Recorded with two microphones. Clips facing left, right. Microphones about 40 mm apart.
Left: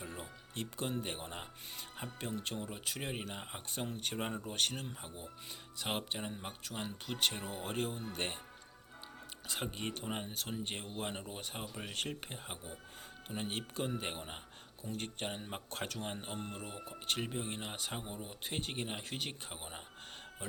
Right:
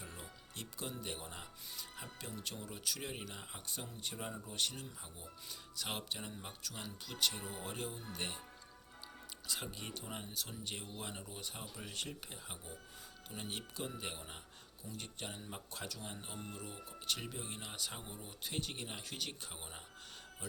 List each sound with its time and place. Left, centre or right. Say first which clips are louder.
0.0 s speech: left 5 dB; left
9.5 s speech: left 5 dB; left
16.7 s speech: left 4 dB; left
20.4 s speech: left 3 dB; left